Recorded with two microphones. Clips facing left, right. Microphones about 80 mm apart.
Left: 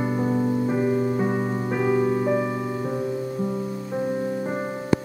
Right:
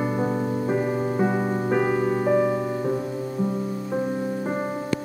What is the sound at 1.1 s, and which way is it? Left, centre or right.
Music, right.